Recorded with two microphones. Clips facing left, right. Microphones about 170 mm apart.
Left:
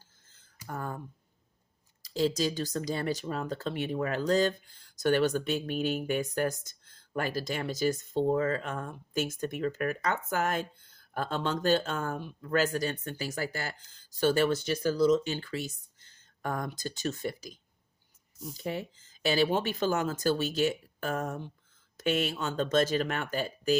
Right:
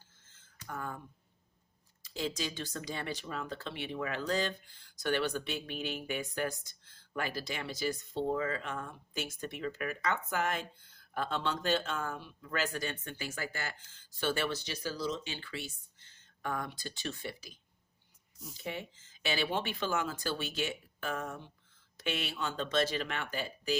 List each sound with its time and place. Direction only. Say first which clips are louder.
0.7 s speech: left 4 dB; 40° left (ahead or behind)